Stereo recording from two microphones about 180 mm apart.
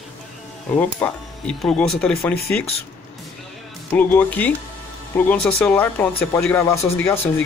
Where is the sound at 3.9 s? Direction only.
10° left (ahead or behind).